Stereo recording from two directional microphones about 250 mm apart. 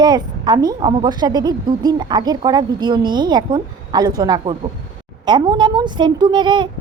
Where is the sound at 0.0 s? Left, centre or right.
Centre.